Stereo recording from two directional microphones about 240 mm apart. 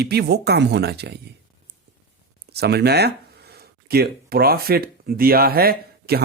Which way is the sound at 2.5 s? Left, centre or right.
Right.